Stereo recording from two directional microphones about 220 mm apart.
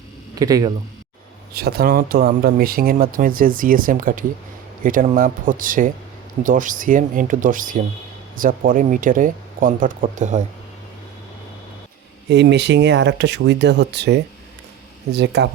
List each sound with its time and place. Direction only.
0.3 s speech: 15° right (ahead or behind)
1.5 s speech: 45° right (ahead or behind)
12.3 s speech: 50° right (ahead or behind)